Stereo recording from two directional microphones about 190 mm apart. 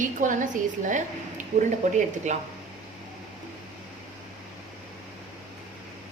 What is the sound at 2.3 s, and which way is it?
Speech, 40° right (ahead or behind).